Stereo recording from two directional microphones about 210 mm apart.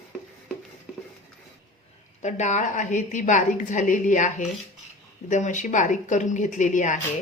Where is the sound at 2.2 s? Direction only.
35° left (ahead or behind).